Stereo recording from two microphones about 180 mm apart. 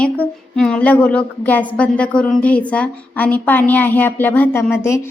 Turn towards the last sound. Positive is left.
turn(degrees=15)  # may be behind; listen again after turning